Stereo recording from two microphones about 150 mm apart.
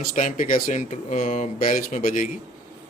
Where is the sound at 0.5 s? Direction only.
65° left (ahead or behind).